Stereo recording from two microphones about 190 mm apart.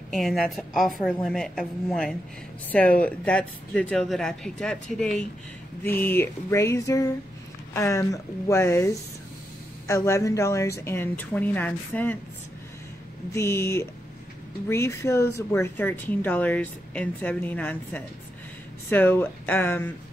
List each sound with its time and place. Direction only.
0.1 s a woman's voice: centre (ahead or behind)
13.3 s speech: 15° left (ahead or behind)